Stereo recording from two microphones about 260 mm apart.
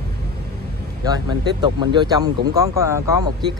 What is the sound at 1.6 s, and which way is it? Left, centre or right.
Speech, centre.